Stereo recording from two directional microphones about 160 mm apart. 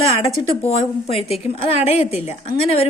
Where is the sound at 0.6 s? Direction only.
40° left (ahead or behind).